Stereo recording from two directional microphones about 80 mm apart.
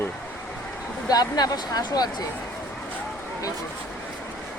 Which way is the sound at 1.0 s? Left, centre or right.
Left.